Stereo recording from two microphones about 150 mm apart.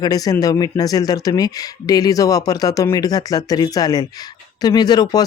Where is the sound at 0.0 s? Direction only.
25° left (ahead or behind).